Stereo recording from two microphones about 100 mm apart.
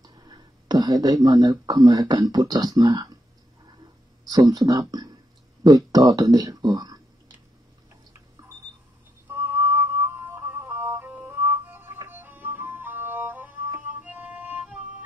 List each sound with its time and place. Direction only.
0.0 s speech: 40° right (ahead or behind)
4.3 s speech: 40° right (ahead or behind)
9.3 s music: 20° right (ahead or behind)